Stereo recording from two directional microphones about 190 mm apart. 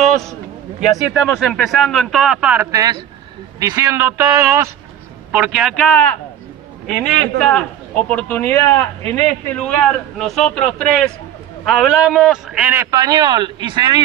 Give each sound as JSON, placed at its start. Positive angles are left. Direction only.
{"t": 0.0, "sound": "a sound", "side_deg": 0}
{"t": 0.7, "sound": "a man's voice", "side_deg": -5}
{"t": 7.4, "sound": "a man's voice", "side_deg": 5}
{"t": 12.9, "sound": "speech", "side_deg": -20}